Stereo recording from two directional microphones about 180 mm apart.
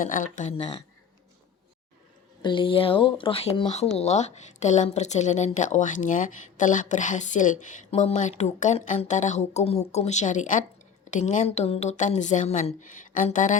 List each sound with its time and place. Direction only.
0.0 s speech: 45° left (ahead or behind)
2.4 s speech: 25° left (ahead or behind); by 13.6 s 45° left (ahead or behind)